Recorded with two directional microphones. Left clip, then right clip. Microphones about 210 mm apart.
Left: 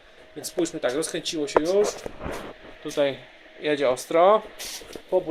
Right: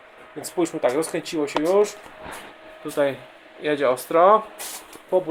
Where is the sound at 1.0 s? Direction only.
5° left (ahead or behind).